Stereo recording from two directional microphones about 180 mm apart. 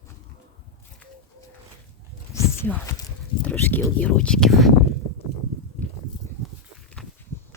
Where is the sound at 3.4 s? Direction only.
10° left (ahead or behind).